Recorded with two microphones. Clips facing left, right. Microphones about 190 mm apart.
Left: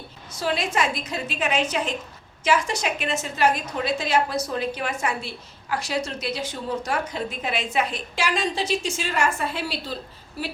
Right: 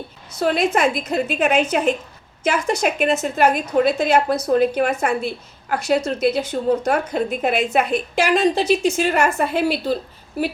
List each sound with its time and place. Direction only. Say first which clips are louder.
0.3 s a woman's voice: right 6 dB; 55° right (ahead or behind)